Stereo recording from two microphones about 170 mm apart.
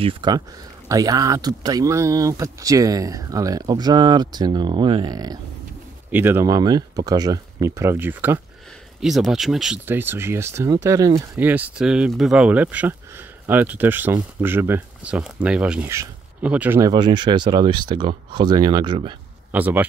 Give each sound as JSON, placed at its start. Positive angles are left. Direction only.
{"t": 0.0, "sound": "speech", "side_deg": -25}
{"t": 9.0, "sound": "speech", "side_deg": 0}
{"t": 16.9, "sound": "speech", "side_deg": -25}
{"t": 19.5, "sound": "speech", "side_deg": -10}